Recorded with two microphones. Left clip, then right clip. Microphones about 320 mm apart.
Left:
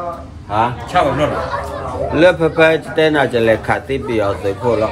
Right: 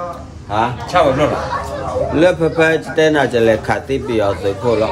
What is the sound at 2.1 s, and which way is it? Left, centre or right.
A man's voice, centre.